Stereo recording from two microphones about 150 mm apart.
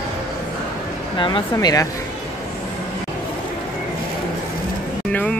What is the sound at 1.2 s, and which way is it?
Speech, 35° left (ahead or behind).